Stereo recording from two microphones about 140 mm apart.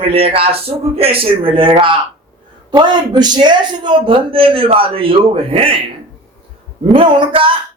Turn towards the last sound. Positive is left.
turn(degrees=-40)  # may be behind; listen again after turning